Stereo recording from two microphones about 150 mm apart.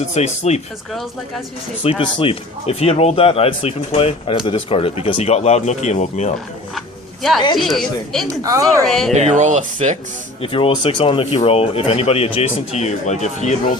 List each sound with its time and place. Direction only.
0.1 s speech: 50° left (ahead or behind)
1.8 s speech: 35° left (ahead or behind)
6.7 s a sound: centre (ahead or behind)
7.5 s speech: centre (ahead or behind)
8.3 s speech: 20° right (ahead or behind)
8.9 s speech: centre (ahead or behind)
9.1 s speech: 50° right (ahead or behind)
10.4 s speech: 35° left (ahead or behind)